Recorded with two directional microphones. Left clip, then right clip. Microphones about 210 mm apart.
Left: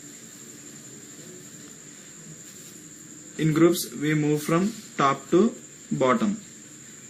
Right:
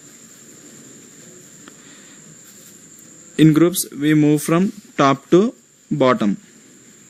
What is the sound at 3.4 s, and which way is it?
Speech, 50° right (ahead or behind).